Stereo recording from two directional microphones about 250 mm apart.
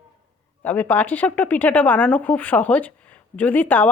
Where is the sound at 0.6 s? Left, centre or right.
Centre.